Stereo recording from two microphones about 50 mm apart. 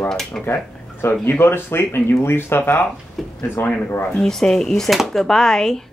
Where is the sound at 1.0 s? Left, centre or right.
Left.